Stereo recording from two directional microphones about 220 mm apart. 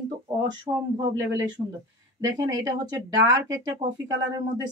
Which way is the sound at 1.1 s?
15° right (ahead or behind).